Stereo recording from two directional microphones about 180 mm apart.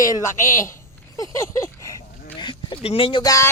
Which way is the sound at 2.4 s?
25° left (ahead or behind).